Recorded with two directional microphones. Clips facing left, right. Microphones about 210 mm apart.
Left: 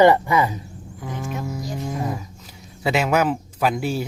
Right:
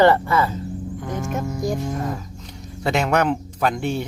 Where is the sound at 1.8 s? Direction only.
5° left (ahead or behind).